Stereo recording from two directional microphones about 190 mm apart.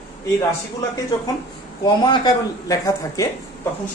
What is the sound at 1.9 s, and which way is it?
Speech, 25° left (ahead or behind).